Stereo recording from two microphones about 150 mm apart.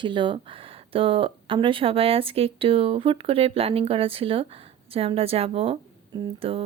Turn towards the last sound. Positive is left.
turn(degrees=-40)  # may be behind; listen again after turning